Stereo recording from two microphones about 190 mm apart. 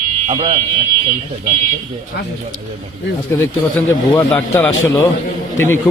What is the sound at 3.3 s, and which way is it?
A man's voice, 15° left (ahead or behind).